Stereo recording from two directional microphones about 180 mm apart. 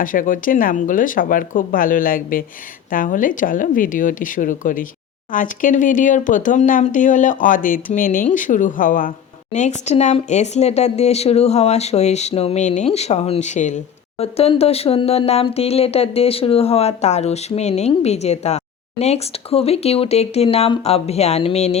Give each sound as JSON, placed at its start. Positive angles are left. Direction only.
{"t": 0.0, "sound": "speech", "side_deg": 50}